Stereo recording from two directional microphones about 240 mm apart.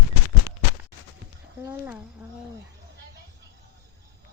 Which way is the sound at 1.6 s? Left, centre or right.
Centre.